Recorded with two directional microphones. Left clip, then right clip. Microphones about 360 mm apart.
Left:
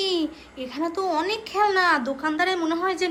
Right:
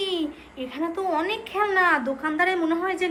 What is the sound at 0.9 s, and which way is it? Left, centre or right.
A woman's voice, centre.